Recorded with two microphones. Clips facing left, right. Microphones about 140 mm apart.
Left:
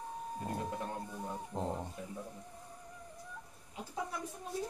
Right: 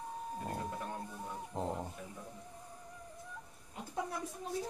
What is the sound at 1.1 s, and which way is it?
Music, centre (ahead or behind).